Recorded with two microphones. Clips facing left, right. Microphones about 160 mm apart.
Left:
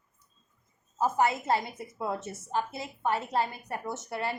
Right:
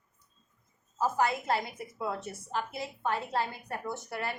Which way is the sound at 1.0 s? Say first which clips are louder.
Left 2 dB; 20° left (ahead or behind).